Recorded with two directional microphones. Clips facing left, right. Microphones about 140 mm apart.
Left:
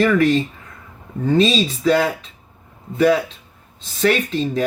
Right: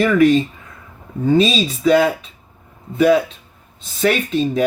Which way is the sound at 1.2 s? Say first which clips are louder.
Right 1 dB; 10° right (ahead or behind).